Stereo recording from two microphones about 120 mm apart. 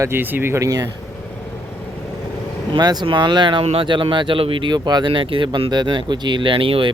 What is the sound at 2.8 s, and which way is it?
Speech, 35° right (ahead or behind).